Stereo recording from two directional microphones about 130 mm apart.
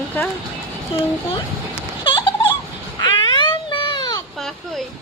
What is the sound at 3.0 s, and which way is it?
Baby cry, 35° left (ahead or behind).